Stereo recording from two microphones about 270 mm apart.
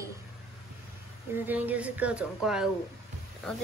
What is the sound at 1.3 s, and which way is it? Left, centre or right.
A woman's voice, centre.